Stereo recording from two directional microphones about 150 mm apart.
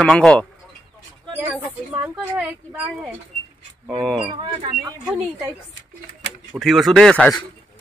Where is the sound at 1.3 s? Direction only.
20° right (ahead or behind).